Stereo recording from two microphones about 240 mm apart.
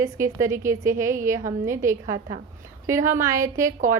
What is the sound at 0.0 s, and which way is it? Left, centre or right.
A woman's voice, centre.